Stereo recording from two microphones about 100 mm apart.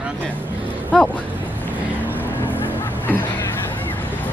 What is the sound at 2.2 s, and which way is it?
Vehicle, 20° left (ahead or behind).